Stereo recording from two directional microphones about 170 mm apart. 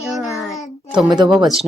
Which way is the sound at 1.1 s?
25° right (ahead or behind).